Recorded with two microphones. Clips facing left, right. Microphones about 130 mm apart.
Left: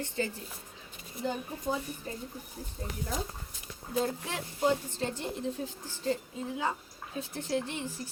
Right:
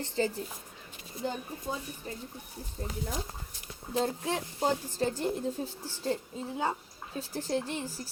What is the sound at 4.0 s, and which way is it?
Speech, 30° right (ahead or behind).